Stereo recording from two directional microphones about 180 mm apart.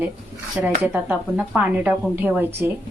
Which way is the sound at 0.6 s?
5° right (ahead or behind).